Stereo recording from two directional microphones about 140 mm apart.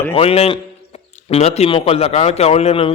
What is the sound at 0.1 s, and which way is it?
A man's voice, 45° left (ahead or behind).